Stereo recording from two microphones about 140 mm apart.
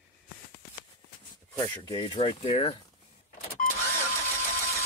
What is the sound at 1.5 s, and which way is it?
Speech, 35° left (ahead or behind).